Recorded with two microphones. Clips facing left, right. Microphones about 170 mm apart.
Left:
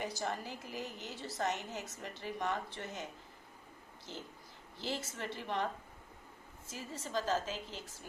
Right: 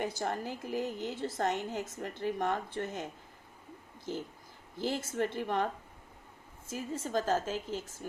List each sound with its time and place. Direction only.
0.0 s a woman's voice: 55° right (ahead or behind)
4.8 s a woman's voice: 50° right (ahead or behind)
6.7 s a woman's voice: 50° right (ahead or behind)